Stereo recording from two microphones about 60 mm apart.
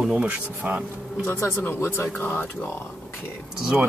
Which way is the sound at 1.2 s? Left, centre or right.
Left.